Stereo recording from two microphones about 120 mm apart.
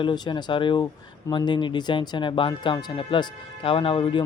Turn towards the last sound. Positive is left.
turn(degrees=45)  # may be behind; listen again after turning